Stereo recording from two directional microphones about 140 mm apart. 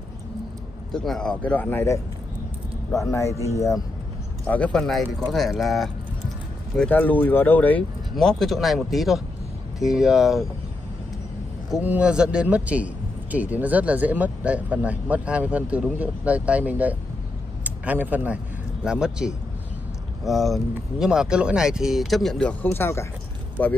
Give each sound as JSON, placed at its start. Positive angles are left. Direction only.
{"t": 0.9, "sound": "a man's voice", "side_deg": 5}
{"t": 4.5, "sound": "speech", "side_deg": 10}
{"t": 6.8, "sound": "speech", "side_deg": 10}
{"t": 11.7, "sound": "a man's voice", "side_deg": -10}